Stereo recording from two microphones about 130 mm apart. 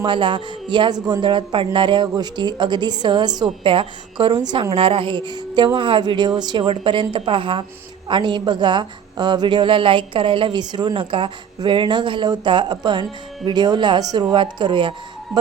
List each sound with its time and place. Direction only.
0.0 s a woman's voice: 40° right (ahead or behind)